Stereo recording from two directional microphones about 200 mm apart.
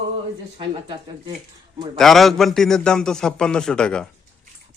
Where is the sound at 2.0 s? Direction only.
Centre (ahead or behind).